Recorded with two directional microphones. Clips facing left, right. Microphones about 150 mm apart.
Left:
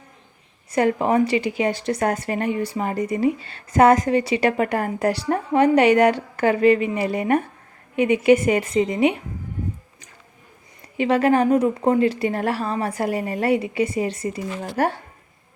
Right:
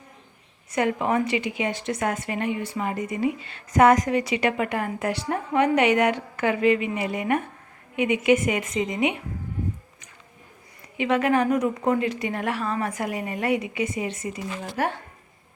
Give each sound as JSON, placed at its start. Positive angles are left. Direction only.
{"t": 0.7, "sound": "a woman's voice", "side_deg": 35}
{"t": 10.9, "sound": "a woman's voice", "side_deg": 35}